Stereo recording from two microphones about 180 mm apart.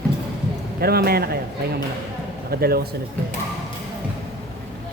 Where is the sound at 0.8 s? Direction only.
60° right (ahead or behind).